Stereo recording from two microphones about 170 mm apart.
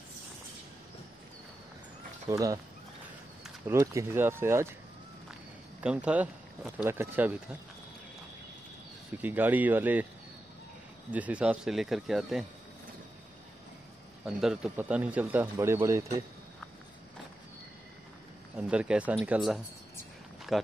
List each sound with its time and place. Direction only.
2.2 s speech: 20° right (ahead or behind)
3.6 s speech: 15° right (ahead or behind)
5.8 s speech: 5° right (ahead or behind)
9.2 s speech: 10° right (ahead or behind)
11.1 s speech: 10° right (ahead or behind)
14.2 s speech: 5° right (ahead or behind)
18.6 s speech: 5° right (ahead or behind)
20.5 s a sound: centre (ahead or behind)